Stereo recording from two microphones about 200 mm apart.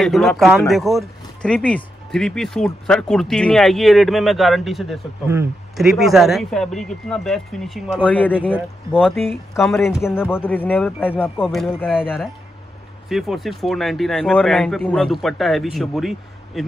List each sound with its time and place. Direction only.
0.0 s speech: centre (ahead or behind)
8.4 s speech: 5° right (ahead or behind)
10.0 s speech: 10° left (ahead or behind)
11.4 s speech: centre (ahead or behind)
13.1 s speech: centre (ahead or behind)